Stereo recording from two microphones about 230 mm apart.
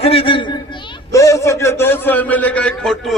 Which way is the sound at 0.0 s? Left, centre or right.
Left.